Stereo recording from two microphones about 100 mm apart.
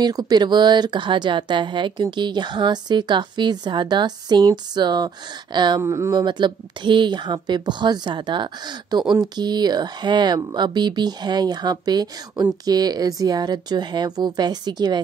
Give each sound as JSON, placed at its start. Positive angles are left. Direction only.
{"t": 0.0, "sound": "speech", "side_deg": -40}
{"t": 5.8, "sound": "speech", "side_deg": -30}
{"t": 6.1, "sound": "speech", "side_deg": -50}